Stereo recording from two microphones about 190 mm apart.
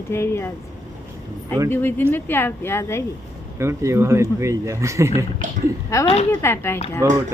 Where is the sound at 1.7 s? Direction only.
10° left (ahead or behind).